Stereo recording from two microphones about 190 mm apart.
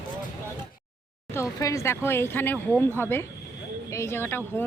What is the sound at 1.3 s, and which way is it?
Speech, 15° left (ahead or behind).